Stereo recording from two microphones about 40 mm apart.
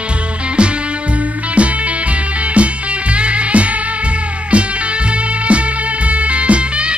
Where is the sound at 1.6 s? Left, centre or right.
Right.